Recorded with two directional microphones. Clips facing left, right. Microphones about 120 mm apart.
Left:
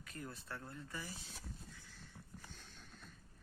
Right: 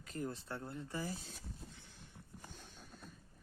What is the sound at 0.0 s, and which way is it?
Speech, 25° right (ahead or behind).